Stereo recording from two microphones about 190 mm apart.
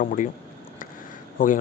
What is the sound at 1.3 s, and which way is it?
Speech, 45° left (ahead or behind).